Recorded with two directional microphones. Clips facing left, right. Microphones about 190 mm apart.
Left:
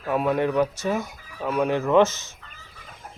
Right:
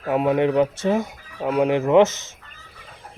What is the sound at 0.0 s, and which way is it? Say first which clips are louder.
Speech: right 4 dB; 20° right (ahead or behind).